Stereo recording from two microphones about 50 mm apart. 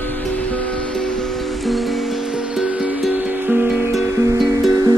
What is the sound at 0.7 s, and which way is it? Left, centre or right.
Music, left.